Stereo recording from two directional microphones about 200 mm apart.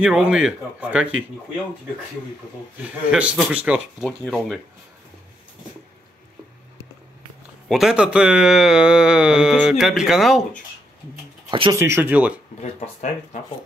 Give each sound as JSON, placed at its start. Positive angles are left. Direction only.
{"t": 0.0, "sound": "speech", "side_deg": -5}
{"t": 2.8, "sound": "speech", "side_deg": -5}
{"t": 4.2, "sound": "speech", "side_deg": 5}
{"t": 7.6, "sound": "speech", "side_deg": 0}
{"t": 11.8, "sound": "speech", "side_deg": -10}
{"t": 12.8, "sound": "speech", "side_deg": 35}